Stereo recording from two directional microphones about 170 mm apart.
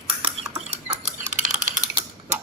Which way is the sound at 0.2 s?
35° right (ahead or behind).